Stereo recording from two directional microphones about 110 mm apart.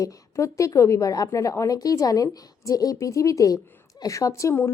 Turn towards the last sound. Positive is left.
turn(degrees=25)  # may be behind; listen again after turning